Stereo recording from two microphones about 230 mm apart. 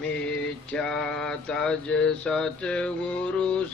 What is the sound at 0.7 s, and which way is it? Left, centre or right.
Mantra, centre.